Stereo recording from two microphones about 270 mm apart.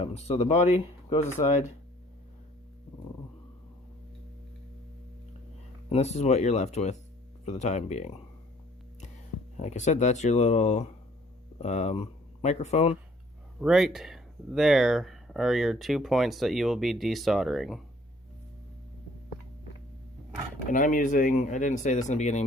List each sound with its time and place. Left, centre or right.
0.0 s speech: left
5.9 s speech: left
9.6 s speech: left
13.6 s speech: centre
20.7 s speech: left